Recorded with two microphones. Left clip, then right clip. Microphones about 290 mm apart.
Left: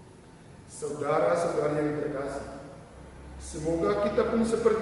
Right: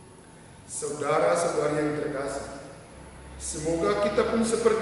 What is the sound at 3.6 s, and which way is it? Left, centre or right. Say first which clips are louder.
A man's voice: right 2 dB; centre.